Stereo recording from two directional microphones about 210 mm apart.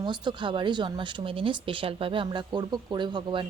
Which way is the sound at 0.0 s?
20° right (ahead or behind).